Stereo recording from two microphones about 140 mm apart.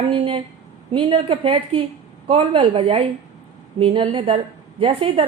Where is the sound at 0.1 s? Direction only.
45° right (ahead or behind).